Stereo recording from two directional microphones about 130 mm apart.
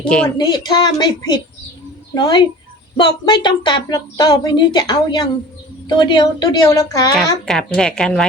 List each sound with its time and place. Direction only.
0.0 s a woman's voice: 10° left (ahead or behind)
0.3 s a woman's voice: 35° left (ahead or behind)
7.4 s a woman's voice: 5° left (ahead or behind)